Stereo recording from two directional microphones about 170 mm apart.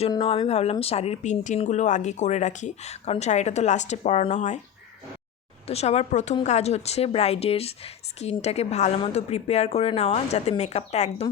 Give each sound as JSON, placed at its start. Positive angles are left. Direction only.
{"t": 0.1, "sound": "speech", "side_deg": 30}
{"t": 5.6, "sound": "speech", "side_deg": 40}